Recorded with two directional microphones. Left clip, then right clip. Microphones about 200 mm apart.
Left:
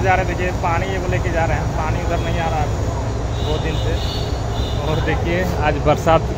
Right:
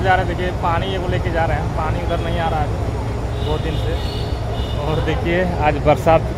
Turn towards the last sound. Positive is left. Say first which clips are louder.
# right 1 dB
turn(degrees=-10)  # may be behind; listen again after turning